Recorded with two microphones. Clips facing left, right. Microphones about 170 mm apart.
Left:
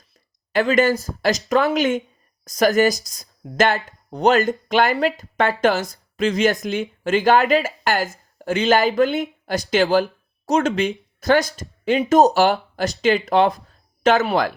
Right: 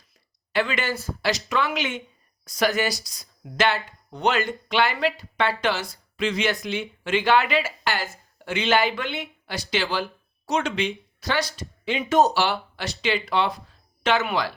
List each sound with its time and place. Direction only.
0.5 s speech: 45° left (ahead or behind)